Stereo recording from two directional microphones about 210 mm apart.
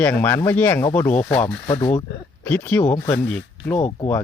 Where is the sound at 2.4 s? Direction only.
10° left (ahead or behind).